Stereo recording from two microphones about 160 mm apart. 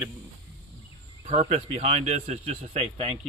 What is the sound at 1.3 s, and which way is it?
Speech, 40° right (ahead or behind).